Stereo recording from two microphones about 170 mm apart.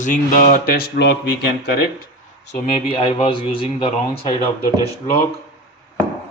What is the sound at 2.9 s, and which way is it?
A man's voice, 30° left (ahead or behind).